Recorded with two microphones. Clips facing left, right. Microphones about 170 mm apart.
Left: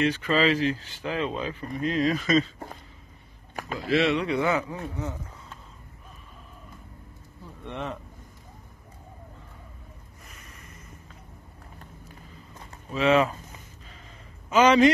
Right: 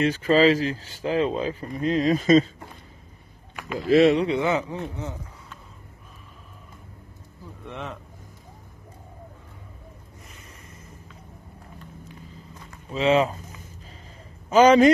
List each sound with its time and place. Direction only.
0.0 s speech: 40° right (ahead or behind)
3.9 s speech: 40° right (ahead or behind)
4.4 s speech: 20° right (ahead or behind)
7.6 s speech: centre (ahead or behind)
10.3 s snort: 30° right (ahead or behind)
12.9 s speech: 30° right (ahead or behind)
14.5 s speech: 40° right (ahead or behind)